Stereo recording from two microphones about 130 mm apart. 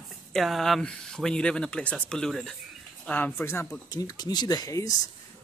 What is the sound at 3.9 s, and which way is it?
Speech, 30° left (ahead or behind).